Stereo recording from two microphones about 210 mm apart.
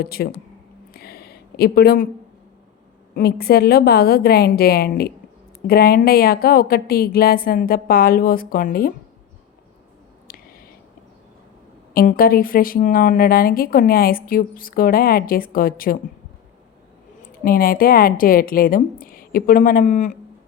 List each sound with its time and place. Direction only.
0.0 s speech: 45° left (ahead or behind)
0.9 s a sound: 45° left (ahead or behind)
3.2 s speech: 45° left (ahead or behind)
10.2 s a sound: 45° left (ahead or behind)
11.9 s speech: 45° left (ahead or behind)
17.4 s speech: 45° left (ahead or behind)